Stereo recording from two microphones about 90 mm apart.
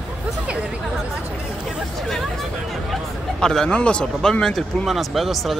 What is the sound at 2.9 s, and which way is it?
Speech, 5° left (ahead or behind).